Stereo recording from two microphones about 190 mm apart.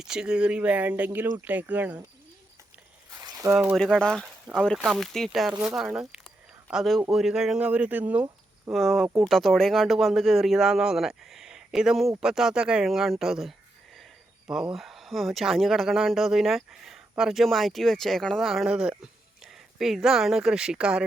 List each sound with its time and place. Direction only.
0.0 s speech: 5° right (ahead or behind)
3.1 s a sound: 20° right (ahead or behind)
3.8 s speech: centre (ahead or behind)
14.5 s speech: 5° right (ahead or behind)